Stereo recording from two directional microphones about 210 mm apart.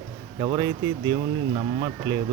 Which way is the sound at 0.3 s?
20° right (ahead or behind).